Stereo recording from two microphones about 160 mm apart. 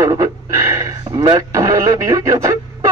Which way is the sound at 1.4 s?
20° right (ahead or behind).